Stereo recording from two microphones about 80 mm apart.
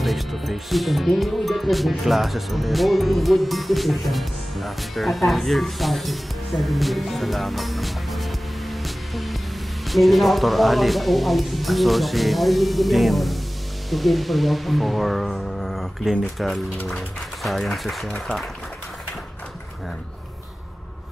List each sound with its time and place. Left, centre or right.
0.0 s speech: centre